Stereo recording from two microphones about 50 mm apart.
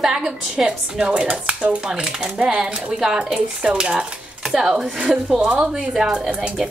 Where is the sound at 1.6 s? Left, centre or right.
Right.